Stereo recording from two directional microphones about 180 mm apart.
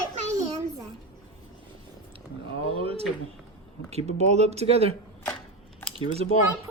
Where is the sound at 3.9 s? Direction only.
35° right (ahead or behind).